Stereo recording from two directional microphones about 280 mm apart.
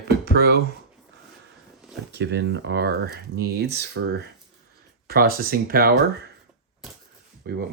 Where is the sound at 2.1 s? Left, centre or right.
Right.